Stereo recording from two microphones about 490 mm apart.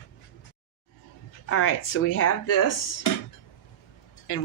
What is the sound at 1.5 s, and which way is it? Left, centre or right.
Speech, left.